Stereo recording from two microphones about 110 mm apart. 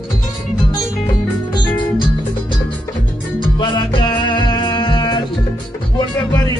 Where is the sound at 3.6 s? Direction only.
45° left (ahead or behind).